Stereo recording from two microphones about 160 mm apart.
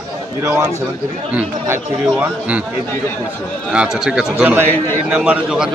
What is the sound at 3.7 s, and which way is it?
A man's voice, 5° right (ahead or behind).